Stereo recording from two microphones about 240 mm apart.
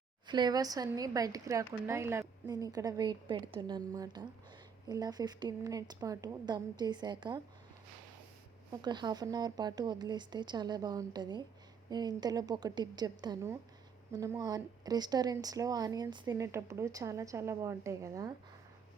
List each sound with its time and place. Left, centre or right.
0.3 s speech: centre
8.7 s speech: centre